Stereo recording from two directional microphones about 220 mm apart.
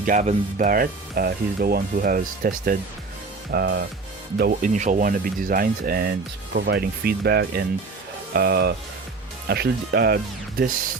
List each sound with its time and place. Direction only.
0.0 s speech: 35° right (ahead or behind)